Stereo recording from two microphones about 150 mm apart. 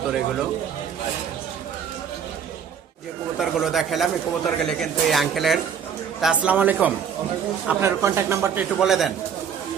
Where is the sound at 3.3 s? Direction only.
Centre (ahead or behind); by 8.6 s 15° right (ahead or behind).